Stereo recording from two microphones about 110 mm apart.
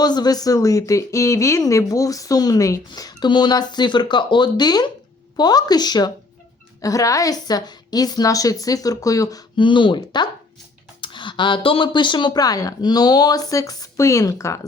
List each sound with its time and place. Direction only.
0.0 s speech: 40° left (ahead or behind)
9.6 s speech: 45° left (ahead or behind); by 14.6 s 30° left (ahead or behind)